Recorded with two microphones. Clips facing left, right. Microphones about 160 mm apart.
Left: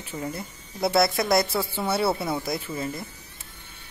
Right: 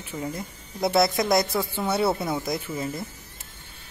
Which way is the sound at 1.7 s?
5° left (ahead or behind).